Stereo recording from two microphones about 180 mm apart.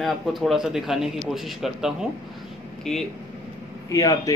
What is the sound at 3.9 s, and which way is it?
Speech, 20° left (ahead or behind).